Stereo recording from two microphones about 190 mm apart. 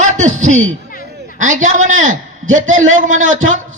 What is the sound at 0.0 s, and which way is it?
Speech, 40° right (ahead or behind).